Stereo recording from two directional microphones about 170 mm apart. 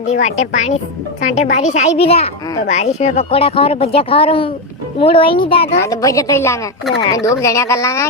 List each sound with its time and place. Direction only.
0.1 s a woman's voice: 40° left (ahead or behind)
5.8 s a woman's voice: 20° left (ahead or behind)